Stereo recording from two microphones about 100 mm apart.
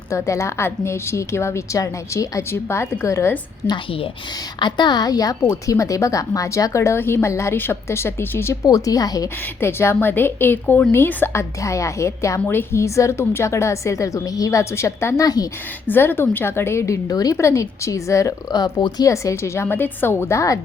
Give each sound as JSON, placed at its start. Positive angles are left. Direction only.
{"t": 0.3, "sound": "a woman's voice", "side_deg": 30}
{"t": 3.6, "sound": "a woman's voice", "side_deg": 20}
{"t": 4.6, "sound": "a woman's voice", "side_deg": 45}
{"t": 8.6, "sound": "a woman's voice", "side_deg": 35}
{"t": 9.6, "sound": "a woman's voice", "side_deg": 25}
{"t": 15.9, "sound": "a woman's voice", "side_deg": 20}
{"t": 19.0, "sound": "a woman's voice", "side_deg": 30}